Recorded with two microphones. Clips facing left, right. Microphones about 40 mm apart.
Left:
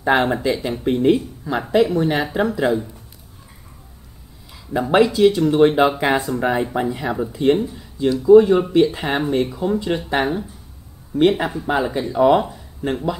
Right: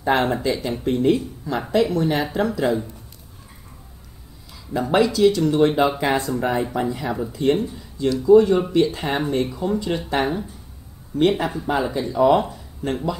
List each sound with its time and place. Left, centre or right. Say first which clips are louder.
0.0 s speech: left 2 dB; centre
4.7 s speech: left 3 dB; centre
12.4 s speech: left 1 dB; centre